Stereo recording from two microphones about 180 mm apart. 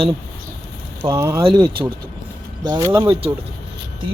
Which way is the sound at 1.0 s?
15° right (ahead or behind).